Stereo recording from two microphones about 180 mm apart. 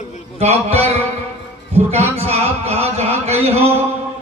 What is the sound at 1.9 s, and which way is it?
Speech, 35° right (ahead or behind).